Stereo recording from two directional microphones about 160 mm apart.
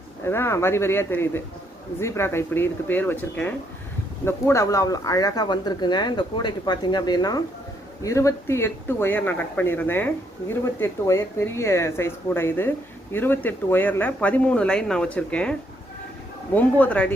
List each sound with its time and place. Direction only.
0.3 s speech: 15° left (ahead or behind)
16.6 s speech: 10° left (ahead or behind)